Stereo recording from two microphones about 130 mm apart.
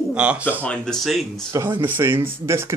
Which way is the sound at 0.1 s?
10° right (ahead or behind).